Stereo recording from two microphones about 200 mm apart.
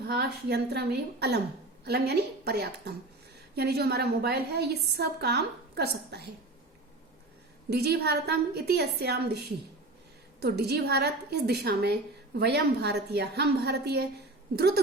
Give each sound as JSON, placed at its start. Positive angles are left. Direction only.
{"t": 0.1, "sound": "a woman's voice", "side_deg": -55}
{"t": 7.7, "sound": "a woman's voice", "side_deg": -55}
{"t": 10.4, "sound": "a woman's voice", "side_deg": -55}